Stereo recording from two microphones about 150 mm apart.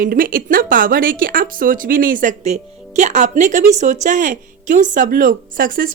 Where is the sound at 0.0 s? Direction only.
65° right (ahead or behind).